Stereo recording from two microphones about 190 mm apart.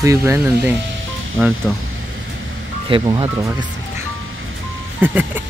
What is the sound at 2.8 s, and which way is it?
Speech, 25° right (ahead or behind).